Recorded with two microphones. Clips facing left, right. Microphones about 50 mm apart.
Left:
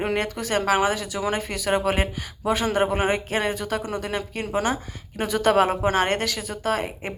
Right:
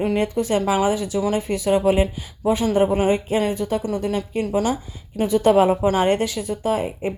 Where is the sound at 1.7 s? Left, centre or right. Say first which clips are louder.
Right 5 dB; left.